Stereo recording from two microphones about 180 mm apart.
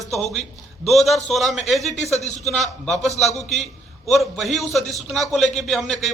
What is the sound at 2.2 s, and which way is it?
Speech, 40° left (ahead or behind).